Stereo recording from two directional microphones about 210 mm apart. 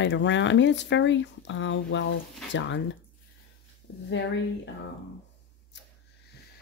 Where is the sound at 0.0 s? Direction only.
60° left (ahead or behind).